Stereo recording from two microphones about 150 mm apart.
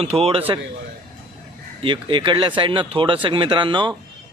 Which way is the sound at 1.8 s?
35° right (ahead or behind).